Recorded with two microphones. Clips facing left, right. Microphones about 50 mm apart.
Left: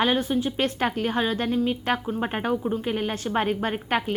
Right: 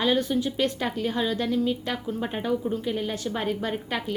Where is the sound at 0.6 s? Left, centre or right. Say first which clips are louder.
Left 2 dB; left.